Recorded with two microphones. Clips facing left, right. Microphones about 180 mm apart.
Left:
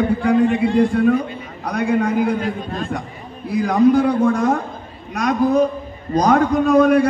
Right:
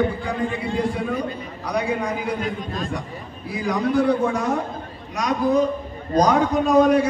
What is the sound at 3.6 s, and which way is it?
Speech, 60° left (ahead or behind).